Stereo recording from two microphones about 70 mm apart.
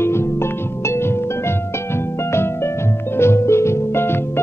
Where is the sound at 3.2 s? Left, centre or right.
Left.